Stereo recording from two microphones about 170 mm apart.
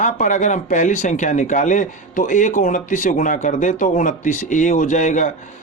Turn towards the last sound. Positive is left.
turn(degrees=45)  # may be behind; listen again after turning